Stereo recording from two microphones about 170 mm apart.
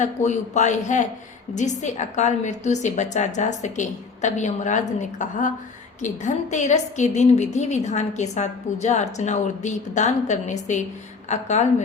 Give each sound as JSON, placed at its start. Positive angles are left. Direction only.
{"t": 0.0, "sound": "a woman's voice", "side_deg": 45}